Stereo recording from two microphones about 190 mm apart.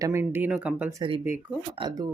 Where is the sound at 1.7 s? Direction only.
25° right (ahead or behind).